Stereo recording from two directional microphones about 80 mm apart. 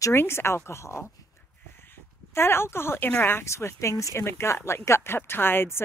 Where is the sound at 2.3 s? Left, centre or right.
Left.